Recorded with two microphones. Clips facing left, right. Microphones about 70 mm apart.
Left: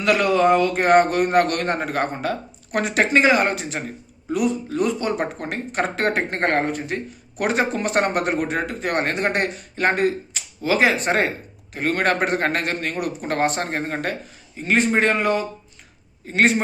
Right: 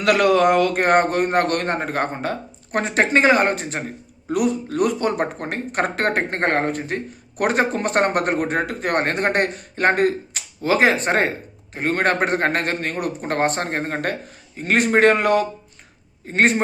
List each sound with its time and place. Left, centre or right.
0.0 s speech: right
0.8 s a man's voice: right
4.3 s speech: right
6.4 s speech: right
6.7 s a man's voice: right
16.2 s a man's voice: right